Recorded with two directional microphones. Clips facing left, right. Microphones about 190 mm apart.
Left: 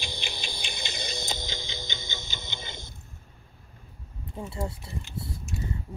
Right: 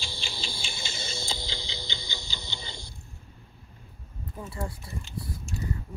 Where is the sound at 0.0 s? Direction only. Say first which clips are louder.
Left 1 dB; 20° left (ahead or behind).